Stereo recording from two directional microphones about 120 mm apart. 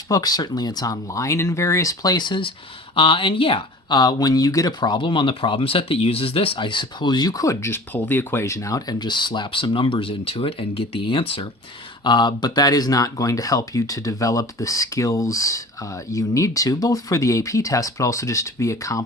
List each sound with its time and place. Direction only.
0.1 s speech: 35° left (ahead or behind); by 11.4 s 50° left (ahead or behind)
12.0 s speech: 40° left (ahead or behind)